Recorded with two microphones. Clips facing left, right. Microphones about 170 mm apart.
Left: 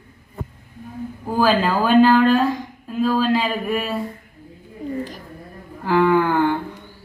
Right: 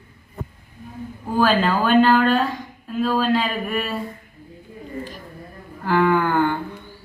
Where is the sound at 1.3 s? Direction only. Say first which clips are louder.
Left 1 dB; 5° left (ahead or behind).